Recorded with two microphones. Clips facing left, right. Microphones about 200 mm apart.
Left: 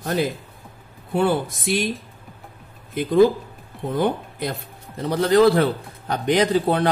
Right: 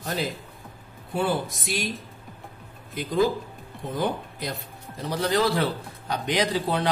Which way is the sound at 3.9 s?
60° left (ahead or behind).